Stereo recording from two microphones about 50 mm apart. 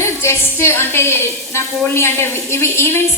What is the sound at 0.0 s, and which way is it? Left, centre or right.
A woman's voice, left.